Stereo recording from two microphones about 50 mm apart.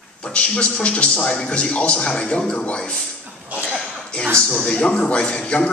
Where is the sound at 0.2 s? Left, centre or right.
Left.